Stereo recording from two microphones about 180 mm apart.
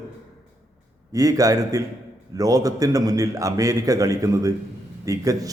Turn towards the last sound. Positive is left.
turn(degrees=-20)  # may be behind; listen again after turning